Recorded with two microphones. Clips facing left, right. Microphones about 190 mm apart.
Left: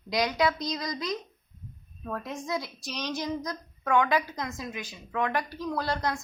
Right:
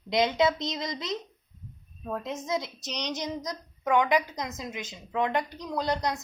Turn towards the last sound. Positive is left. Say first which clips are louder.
# right 1 dB
turn(degrees=-20)  # may be behind; listen again after turning